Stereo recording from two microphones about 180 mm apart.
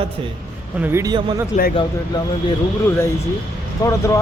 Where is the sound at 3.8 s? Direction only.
15° left (ahead or behind).